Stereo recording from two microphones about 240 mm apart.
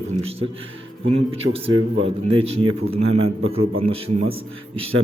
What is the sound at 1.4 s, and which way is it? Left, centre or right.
Speech, right.